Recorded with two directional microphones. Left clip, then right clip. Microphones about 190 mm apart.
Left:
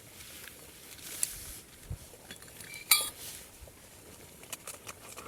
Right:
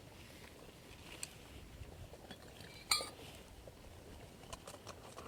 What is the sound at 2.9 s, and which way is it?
Cutlery, 40° left (ahead or behind).